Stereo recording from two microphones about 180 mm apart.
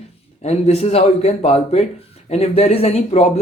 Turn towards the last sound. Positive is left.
turn(degrees=35)  # may be behind; listen again after turning